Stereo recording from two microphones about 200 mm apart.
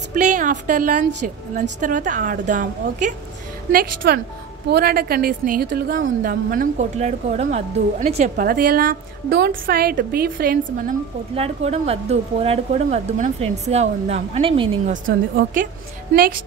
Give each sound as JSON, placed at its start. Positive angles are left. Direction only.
{"t": 0.1, "sound": "a woman's voice", "side_deg": -40}
{"t": 8.5, "sound": "a woman's voice", "side_deg": -45}
{"t": 11.3, "sound": "speech", "side_deg": -30}